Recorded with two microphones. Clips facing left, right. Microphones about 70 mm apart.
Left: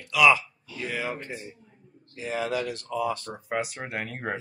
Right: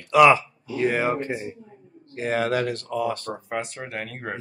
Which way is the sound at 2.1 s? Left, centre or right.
Right.